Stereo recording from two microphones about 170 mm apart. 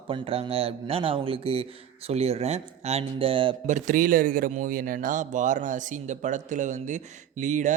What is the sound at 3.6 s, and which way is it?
Speech, 50° right (ahead or behind).